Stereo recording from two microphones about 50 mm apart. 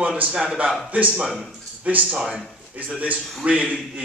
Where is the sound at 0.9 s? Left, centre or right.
Right.